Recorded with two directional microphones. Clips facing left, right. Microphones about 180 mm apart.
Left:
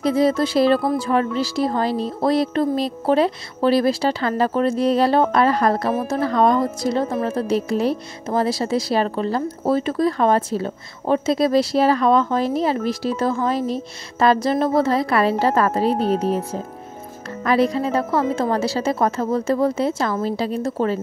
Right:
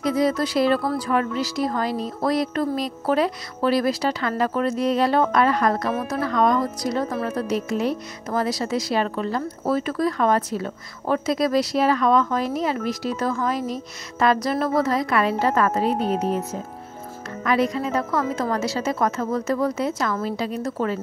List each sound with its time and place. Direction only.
0.0 s speech: 30° left (ahead or behind)